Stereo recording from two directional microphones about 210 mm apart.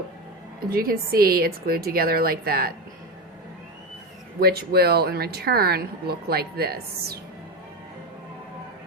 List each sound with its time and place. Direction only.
0.6 s speech: 45° right (ahead or behind)
4.4 s speech: 50° right (ahead or behind)